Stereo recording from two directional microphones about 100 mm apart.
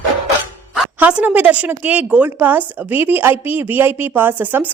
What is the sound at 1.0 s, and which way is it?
A woman's voice, 15° right (ahead or behind).